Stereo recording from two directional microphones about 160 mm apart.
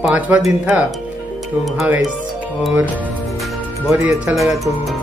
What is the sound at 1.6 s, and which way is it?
Speech, centre (ahead or behind).